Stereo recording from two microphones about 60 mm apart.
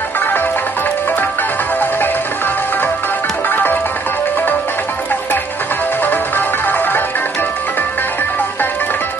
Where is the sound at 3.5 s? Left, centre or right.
Left.